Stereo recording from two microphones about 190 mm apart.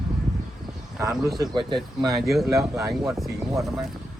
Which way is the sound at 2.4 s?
15° right (ahead or behind).